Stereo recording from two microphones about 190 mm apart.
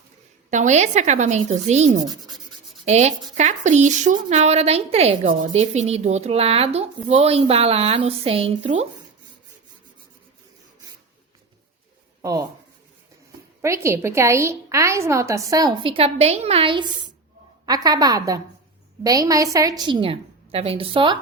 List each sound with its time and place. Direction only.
0.5 s a woman's voice: 40° right (ahead or behind)
12.2 s speech: 20° right (ahead or behind)
13.6 s a woman's voice: 15° right (ahead or behind)